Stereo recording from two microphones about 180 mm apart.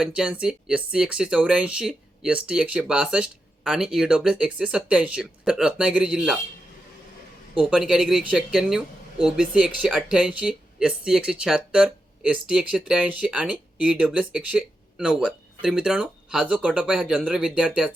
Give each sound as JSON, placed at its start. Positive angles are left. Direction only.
{"t": 0.0, "sound": "speech", "side_deg": -5}
{"t": 7.6, "sound": "speech", "side_deg": -5}